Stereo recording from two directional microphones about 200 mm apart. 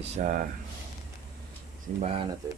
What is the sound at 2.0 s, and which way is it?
Speech, 30° right (ahead or behind).